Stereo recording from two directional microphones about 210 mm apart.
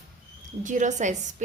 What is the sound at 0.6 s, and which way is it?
Speech, 35° right (ahead or behind).